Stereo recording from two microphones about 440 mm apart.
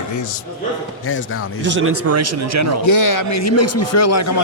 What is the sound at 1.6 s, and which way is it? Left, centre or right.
Speech, right.